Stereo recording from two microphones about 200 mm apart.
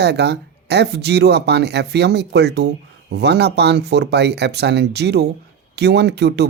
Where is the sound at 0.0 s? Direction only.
55° right (ahead or behind).